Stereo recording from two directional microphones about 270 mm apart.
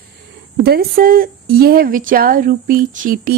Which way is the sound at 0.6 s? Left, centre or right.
Right.